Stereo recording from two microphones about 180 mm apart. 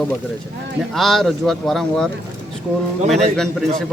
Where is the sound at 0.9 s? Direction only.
Centre (ahead or behind).